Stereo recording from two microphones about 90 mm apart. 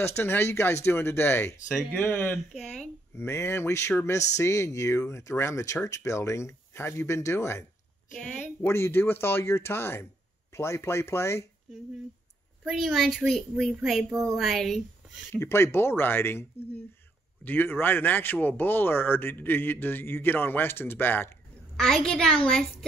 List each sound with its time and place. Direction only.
0.0 s speech: 25° left (ahead or behind)
2.5 s speech: 5° left (ahead or behind)
3.2 s speech: 30° left (ahead or behind)
12.6 s a woman's voice: centre (ahead or behind)
15.3 s speech: 30° left (ahead or behind)
21.7 s a woman's voice: 5° left (ahead or behind)